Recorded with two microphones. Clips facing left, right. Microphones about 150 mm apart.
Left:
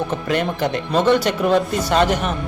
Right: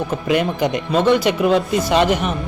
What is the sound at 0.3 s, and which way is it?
Speech, 10° right (ahead or behind).